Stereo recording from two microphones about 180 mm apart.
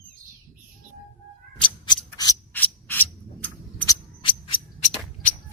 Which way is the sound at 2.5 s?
10° left (ahead or behind).